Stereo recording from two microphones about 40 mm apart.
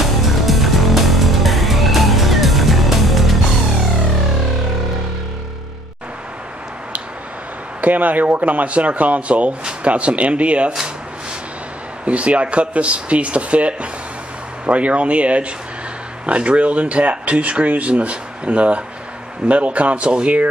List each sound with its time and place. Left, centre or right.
0.0 s music: centre
7.8 s speech: right
12.0 s speech: right